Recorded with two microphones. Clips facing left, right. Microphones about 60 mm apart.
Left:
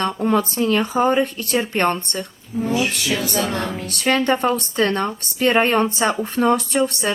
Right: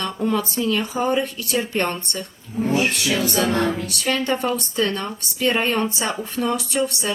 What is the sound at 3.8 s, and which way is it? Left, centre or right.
A woman's voice, left.